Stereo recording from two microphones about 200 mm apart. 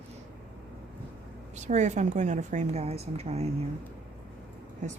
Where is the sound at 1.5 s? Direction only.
35° right (ahead or behind).